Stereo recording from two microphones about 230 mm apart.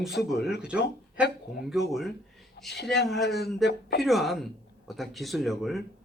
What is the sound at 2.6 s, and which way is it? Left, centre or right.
Speech, left.